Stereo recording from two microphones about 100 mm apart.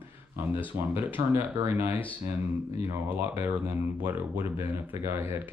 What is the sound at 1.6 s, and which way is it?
Speech, 20° right (ahead or behind).